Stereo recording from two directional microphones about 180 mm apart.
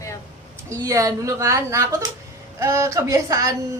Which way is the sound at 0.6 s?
20° right (ahead or behind).